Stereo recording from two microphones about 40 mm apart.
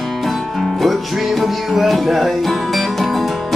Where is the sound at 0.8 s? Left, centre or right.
Centre.